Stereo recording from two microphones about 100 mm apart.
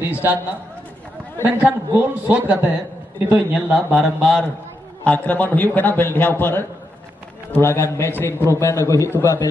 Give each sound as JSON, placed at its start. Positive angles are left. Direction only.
{"t": 0.0, "sound": "a man's voice", "side_deg": -20}
{"t": 1.4, "sound": "a man's voice", "side_deg": -15}
{"t": 3.9, "sound": "a man's voice", "side_deg": 0}
{"t": 5.0, "sound": "a man's voice", "side_deg": 15}